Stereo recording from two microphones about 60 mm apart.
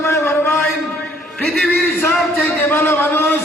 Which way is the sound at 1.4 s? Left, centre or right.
Centre.